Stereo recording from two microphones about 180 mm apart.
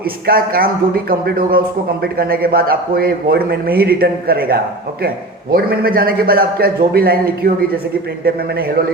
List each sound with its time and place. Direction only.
0.3 s speech: 55° right (ahead or behind)